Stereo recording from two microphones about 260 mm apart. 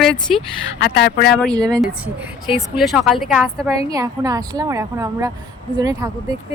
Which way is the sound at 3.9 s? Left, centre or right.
Centre.